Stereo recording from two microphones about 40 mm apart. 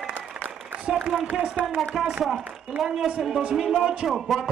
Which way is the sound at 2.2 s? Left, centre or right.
Centre.